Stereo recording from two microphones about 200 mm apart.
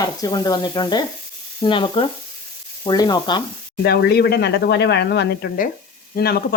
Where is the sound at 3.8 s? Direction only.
55° left (ahead or behind).